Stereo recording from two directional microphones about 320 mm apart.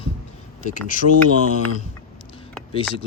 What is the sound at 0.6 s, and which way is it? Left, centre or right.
Speech, left.